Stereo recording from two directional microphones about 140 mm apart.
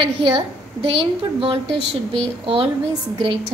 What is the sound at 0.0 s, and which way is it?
A woman's voice, 40° right (ahead or behind).